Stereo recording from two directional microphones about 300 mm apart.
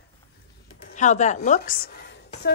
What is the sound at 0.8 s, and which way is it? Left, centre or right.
A woman's voice, left.